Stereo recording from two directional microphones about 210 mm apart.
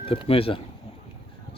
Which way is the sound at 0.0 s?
25° left (ahead or behind).